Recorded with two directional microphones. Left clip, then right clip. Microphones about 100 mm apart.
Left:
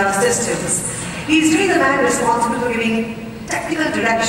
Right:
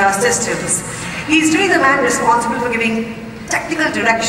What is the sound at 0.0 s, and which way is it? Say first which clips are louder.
Music: right 2 dB; 15° right (ahead or behind).